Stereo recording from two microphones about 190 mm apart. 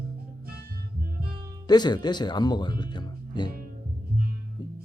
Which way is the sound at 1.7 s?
20° left (ahead or behind).